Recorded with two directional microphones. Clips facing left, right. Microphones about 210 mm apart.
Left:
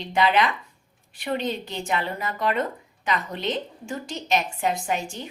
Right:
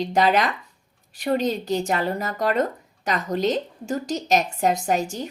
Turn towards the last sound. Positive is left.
turn(degrees=-40)  # may be behind; listen again after turning